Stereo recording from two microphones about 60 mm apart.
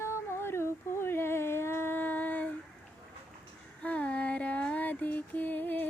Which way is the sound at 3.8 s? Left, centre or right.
Left.